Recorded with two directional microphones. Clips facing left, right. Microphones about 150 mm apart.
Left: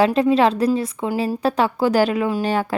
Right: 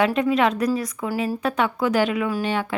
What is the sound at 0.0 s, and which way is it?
A woman's voice, 30° left (ahead or behind).